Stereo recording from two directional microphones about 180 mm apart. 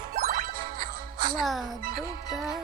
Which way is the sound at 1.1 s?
25° right (ahead or behind).